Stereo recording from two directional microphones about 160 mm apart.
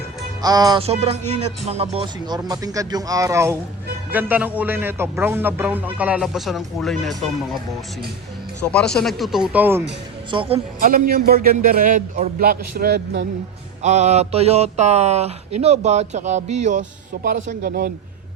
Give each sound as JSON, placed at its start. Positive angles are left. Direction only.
{"t": 0.4, "sound": "speech", "side_deg": -25}
{"t": 0.8, "sound": "speech", "side_deg": -40}
{"t": 4.1, "sound": "music", "side_deg": -10}
{"t": 8.7, "sound": "speech", "side_deg": 5}
{"t": 10.3, "sound": "a woman's voice", "side_deg": -35}
{"t": 10.8, "sound": "a man's voice", "side_deg": -60}
{"t": 13.8, "sound": "speech", "side_deg": -45}